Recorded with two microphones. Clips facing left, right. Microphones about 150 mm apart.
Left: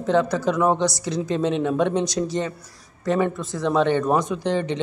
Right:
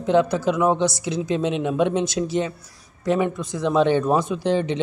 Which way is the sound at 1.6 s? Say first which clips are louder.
Even; 15° right (ahead or behind).